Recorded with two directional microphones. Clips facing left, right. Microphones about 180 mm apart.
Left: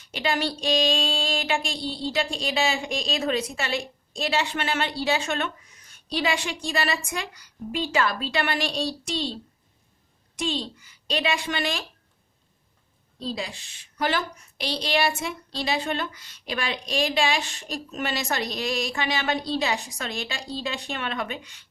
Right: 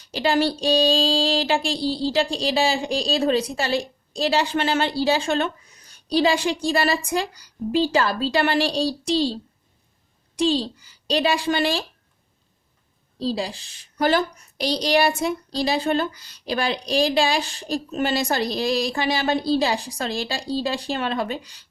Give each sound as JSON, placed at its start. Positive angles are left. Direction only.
{"t": 0.0, "sound": "speech", "side_deg": -35}
{"t": 13.1, "sound": "speech", "side_deg": -35}